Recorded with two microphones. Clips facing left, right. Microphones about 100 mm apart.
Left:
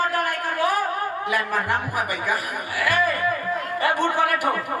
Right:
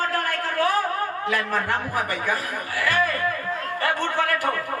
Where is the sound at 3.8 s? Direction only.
15° left (ahead or behind).